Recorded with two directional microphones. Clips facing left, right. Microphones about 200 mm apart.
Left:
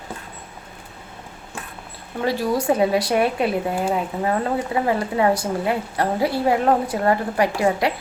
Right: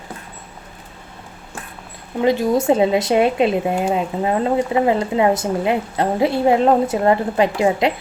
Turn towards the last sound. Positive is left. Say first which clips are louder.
# right 3 dB
turn(degrees=-20)  # may be behind; listen again after turning